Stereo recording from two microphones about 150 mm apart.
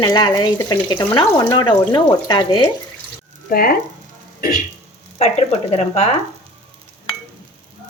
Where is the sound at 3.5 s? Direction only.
80° left.